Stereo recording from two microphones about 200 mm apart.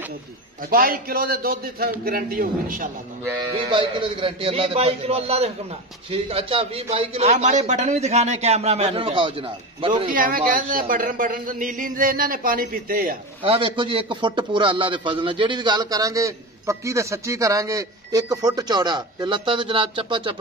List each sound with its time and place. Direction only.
0.7 s a man's voice: 45° right (ahead or behind)
3.5 s a man's voice: 25° right (ahead or behind)
10.0 s a man's voice: 45° right (ahead or behind)
13.4 s a man's voice: 25° right (ahead or behind)